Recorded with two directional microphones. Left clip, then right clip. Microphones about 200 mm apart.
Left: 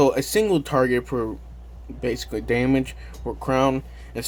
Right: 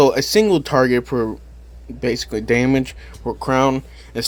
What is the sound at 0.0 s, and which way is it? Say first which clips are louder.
Speech: right 5 dB; 30° right (ahead or behind).